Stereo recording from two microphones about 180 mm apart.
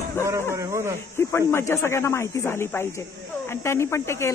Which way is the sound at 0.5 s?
15° right (ahead or behind).